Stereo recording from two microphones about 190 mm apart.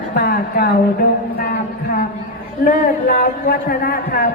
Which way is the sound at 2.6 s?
50° left (ahead or behind).